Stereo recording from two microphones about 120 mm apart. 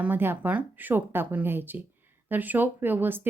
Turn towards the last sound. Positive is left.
turn(degrees=-15)  # may be behind; listen again after turning